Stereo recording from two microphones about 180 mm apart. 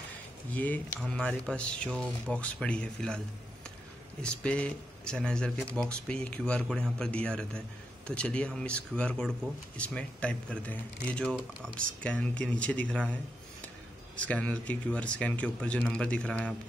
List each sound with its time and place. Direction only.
0.6 s speech: 10° left (ahead or behind)
4.2 s speech: 5° left (ahead or behind)